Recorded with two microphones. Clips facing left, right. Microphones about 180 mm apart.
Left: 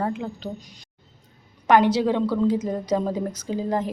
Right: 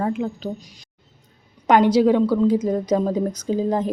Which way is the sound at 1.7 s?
20° right (ahead or behind).